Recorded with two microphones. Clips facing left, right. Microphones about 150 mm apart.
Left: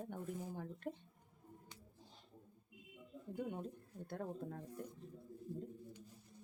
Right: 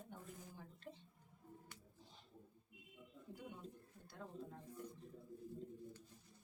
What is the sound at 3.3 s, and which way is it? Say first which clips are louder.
Speech: left 11 dB; 55° left (ahead or behind).